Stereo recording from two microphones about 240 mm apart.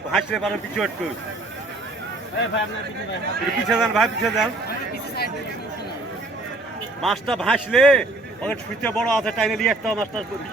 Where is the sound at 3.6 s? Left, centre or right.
Centre.